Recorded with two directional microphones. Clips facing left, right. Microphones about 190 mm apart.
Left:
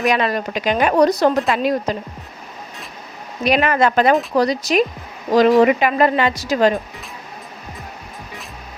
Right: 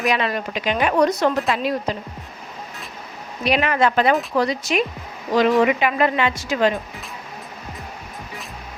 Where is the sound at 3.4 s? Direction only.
45° left (ahead or behind).